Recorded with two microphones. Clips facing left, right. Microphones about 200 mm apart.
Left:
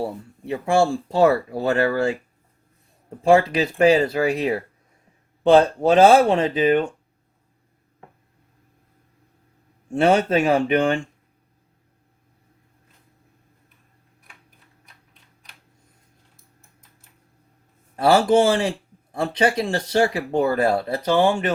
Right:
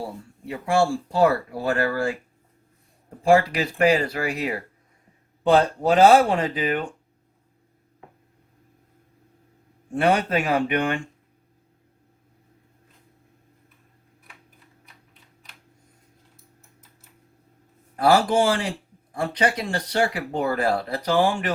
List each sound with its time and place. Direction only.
0.0 s speech: 25° left (ahead or behind)
3.2 s speech: 25° left (ahead or behind)
9.9 s speech: 25° left (ahead or behind)
18.0 s speech: 25° left (ahead or behind)